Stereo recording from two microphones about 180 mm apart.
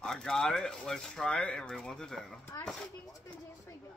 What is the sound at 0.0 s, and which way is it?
Speech, 5° left (ahead or behind).